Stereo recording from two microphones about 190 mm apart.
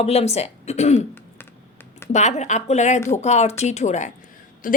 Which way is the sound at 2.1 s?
35° left (ahead or behind).